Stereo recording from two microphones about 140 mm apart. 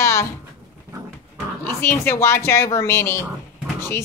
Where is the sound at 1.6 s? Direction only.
15° left (ahead or behind).